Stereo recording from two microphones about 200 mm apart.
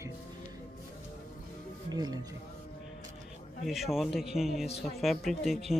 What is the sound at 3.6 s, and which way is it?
Speech, centre (ahead or behind).